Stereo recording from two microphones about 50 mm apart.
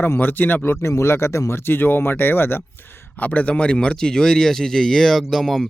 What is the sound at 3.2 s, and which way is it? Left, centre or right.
A man's voice, left.